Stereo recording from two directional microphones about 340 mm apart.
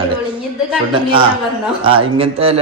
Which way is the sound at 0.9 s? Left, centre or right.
Centre.